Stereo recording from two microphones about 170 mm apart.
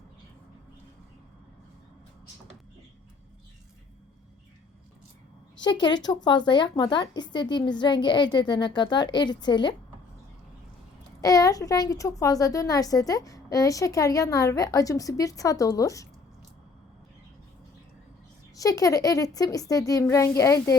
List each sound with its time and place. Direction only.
5.6 s a woman's voice: 25° left (ahead or behind)
11.2 s a woman's voice: 20° left (ahead or behind)
18.5 s a woman's voice: 20° left (ahead or behind)